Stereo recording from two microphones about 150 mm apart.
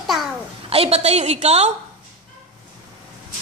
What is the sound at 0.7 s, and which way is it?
A woman's voice, 40° right (ahead or behind).